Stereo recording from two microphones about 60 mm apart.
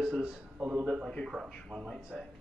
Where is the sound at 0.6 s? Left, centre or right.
Right.